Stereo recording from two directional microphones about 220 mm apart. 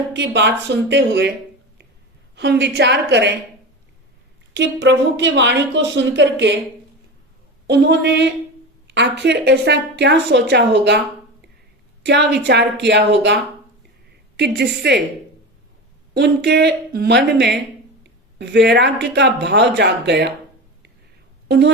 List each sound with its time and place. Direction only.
0.1 s speech: 50° right (ahead or behind)
2.3 s speech: 50° right (ahead or behind)
4.5 s speech: 55° right (ahead or behind)
7.7 s speech: 50° right (ahead or behind)
12.0 s speech: 50° right (ahead or behind)
16.1 s speech: 50° right (ahead or behind)
21.4 s a woman's voice: 50° right (ahead or behind)